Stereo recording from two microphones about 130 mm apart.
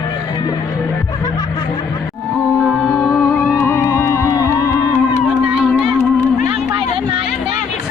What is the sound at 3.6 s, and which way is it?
Music, 20° left (ahead or behind).